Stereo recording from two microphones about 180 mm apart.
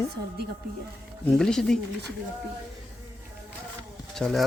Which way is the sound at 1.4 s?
5° left (ahead or behind).